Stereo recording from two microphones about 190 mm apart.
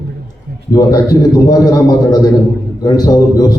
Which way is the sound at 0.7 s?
20° left (ahead or behind).